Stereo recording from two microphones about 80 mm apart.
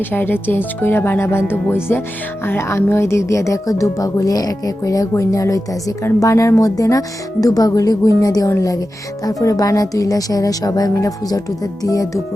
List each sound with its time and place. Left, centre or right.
0.1 s speech: left